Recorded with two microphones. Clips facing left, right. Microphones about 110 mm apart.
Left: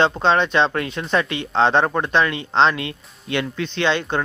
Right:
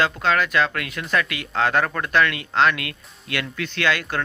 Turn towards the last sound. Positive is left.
turn(degrees=25)  # may be behind; listen again after turning